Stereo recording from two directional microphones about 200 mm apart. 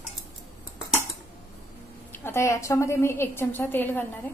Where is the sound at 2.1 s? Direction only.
10° left (ahead or behind).